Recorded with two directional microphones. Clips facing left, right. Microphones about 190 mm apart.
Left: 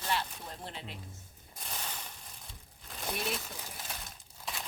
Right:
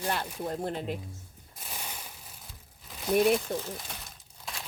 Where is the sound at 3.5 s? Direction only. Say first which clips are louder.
Right 14 dB; 60° right (ahead or behind).